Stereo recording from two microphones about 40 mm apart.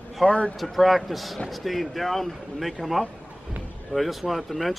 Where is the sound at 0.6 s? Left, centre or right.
Centre.